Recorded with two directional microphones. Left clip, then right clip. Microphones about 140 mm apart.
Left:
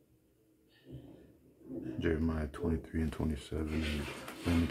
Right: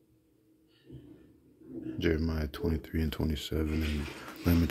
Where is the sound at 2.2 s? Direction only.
40° right (ahead or behind).